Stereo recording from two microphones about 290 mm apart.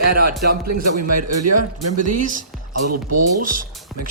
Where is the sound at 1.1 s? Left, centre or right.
Right.